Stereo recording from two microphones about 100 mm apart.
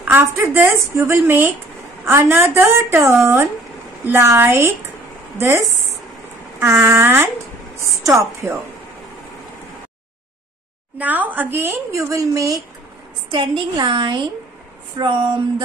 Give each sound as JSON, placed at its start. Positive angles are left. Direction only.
{"t": 0.0, "sound": "a woman's voice", "side_deg": -20}
{"t": 11.0, "sound": "a woman's voice", "side_deg": -15}
{"t": 13.3, "sound": "a woman's voice", "side_deg": -50}